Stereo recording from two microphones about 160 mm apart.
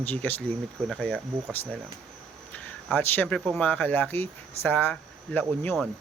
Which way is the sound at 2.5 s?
10° left (ahead or behind).